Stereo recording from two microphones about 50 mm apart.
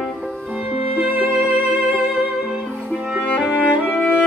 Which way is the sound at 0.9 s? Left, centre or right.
Right.